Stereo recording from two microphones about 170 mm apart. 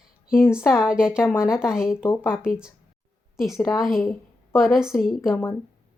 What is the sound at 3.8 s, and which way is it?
A woman's voice, centre (ahead or behind).